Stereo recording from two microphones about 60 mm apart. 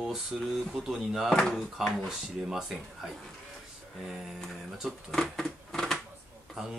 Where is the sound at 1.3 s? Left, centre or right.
Centre.